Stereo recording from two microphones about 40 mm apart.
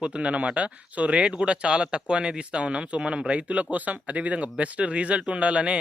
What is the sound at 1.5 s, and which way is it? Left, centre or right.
Speech, right.